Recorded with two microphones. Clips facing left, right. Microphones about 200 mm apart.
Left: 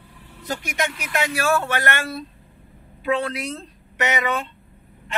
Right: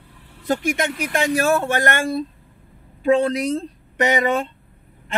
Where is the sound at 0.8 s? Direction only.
50° right (ahead or behind).